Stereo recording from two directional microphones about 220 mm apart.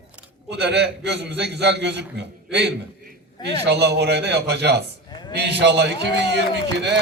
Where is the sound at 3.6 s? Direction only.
50° right (ahead or behind).